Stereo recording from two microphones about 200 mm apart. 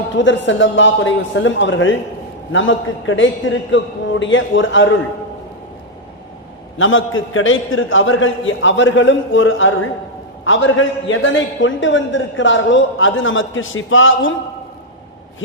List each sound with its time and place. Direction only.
0.2 s a man's voice: 65° left (ahead or behind)
6.7 s a man's voice: 80° left